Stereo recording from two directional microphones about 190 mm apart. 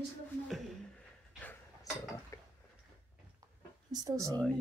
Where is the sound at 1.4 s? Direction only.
15° left (ahead or behind).